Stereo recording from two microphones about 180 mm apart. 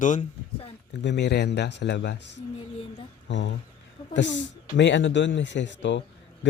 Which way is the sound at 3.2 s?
90° left.